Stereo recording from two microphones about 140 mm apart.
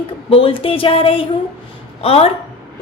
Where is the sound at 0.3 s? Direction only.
40° left (ahead or behind).